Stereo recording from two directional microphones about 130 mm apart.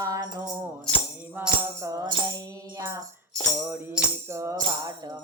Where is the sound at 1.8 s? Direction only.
30° right (ahead or behind).